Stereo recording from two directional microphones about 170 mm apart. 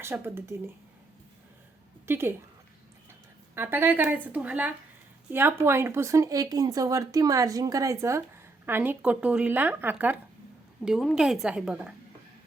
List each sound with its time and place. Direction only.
0.0 s speech: 15° right (ahead or behind)
2.0 s speech: 15° right (ahead or behind)
3.5 s a woman's voice: 15° right (ahead or behind)